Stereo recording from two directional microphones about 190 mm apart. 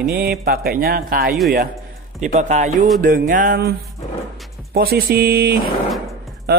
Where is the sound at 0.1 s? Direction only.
55° right (ahead or behind).